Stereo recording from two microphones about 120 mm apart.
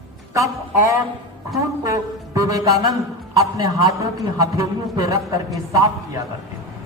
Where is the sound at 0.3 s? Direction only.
25° right (ahead or behind).